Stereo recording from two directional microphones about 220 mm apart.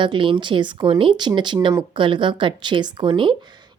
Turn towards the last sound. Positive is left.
turn(degrees=-20)  # may be behind; listen again after turning